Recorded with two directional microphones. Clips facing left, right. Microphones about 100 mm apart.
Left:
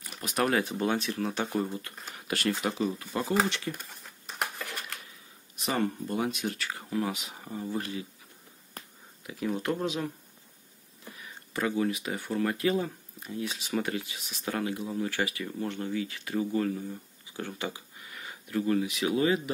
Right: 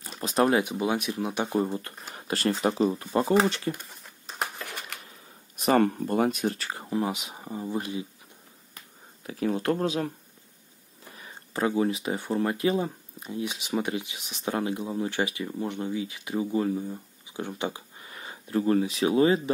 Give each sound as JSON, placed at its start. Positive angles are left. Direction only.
{"t": 0.0, "sound": "speech", "side_deg": -30}
{"t": 1.6, "sound": "speech", "side_deg": -30}
{"t": 2.1, "sound": "a sound", "side_deg": -35}
{"t": 2.6, "sound": "speech", "side_deg": -35}
{"t": 5.6, "sound": "speech", "side_deg": -50}
{"t": 8.8, "sound": "a sound", "side_deg": 40}
{"t": 9.2, "sound": "speech", "side_deg": -35}
{"t": 11.1, "sound": "speech", "side_deg": -30}